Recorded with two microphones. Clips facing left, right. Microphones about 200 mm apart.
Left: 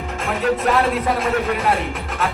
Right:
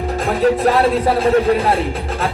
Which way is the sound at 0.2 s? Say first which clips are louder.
Right 5 dB; 35° right (ahead or behind).